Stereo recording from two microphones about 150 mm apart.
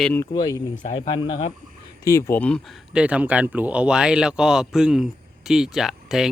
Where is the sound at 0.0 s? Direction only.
15° left (ahead or behind).